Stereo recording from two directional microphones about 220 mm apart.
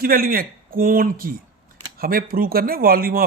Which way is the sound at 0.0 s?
40° right (ahead or behind).